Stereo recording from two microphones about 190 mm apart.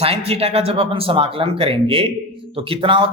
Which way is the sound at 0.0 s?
30° right (ahead or behind).